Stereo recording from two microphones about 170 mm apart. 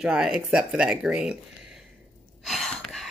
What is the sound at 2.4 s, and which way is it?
Gasp, centre (ahead or behind).